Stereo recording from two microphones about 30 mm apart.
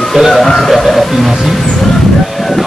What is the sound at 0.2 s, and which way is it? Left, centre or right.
Music, right.